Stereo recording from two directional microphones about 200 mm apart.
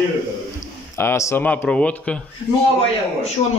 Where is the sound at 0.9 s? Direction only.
15° left (ahead or behind).